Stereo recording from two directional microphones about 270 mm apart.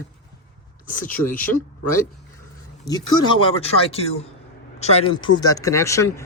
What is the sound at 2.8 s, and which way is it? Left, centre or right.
Speech, centre.